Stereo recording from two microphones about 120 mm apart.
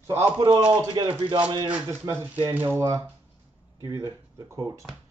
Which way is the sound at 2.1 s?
25° right (ahead or behind).